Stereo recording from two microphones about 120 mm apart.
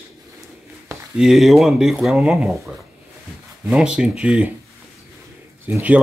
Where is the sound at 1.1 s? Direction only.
Centre (ahead or behind).